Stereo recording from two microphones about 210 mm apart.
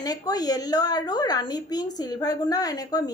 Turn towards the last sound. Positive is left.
turn(degrees=20)  # may be behind; listen again after turning